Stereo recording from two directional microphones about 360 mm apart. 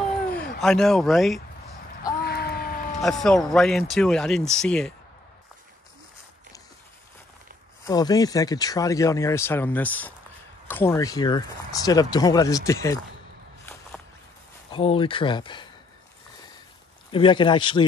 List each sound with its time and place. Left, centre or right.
0.6 s speech: centre
2.2 s a sound: left
3.0 s speech: centre
7.8 s speech: centre
14.7 s speech: centre
17.1 s speech: centre